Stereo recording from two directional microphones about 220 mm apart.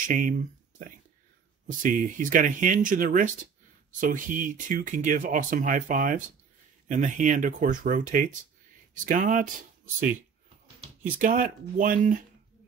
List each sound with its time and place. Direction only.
0.0 s speech: 35° right (ahead or behind)
11.1 s speech: 40° right (ahead or behind)